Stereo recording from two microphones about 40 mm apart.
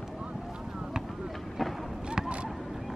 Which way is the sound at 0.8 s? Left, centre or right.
Centre.